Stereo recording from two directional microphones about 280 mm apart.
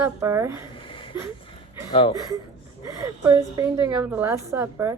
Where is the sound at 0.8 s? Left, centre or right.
Centre.